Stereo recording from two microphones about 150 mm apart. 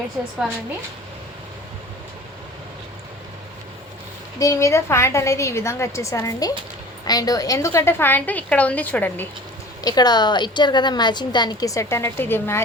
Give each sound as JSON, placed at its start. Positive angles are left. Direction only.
{"t": 4.4, "sound": "a woman's voice", "side_deg": 20}
{"t": 9.8, "sound": "a woman's voice", "side_deg": 25}